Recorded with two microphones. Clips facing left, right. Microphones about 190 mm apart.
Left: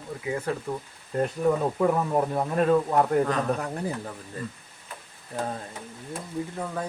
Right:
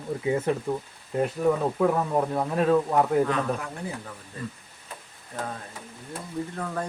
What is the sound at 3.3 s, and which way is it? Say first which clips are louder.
Speech: left 1 dB; 35° left (ahead or behind).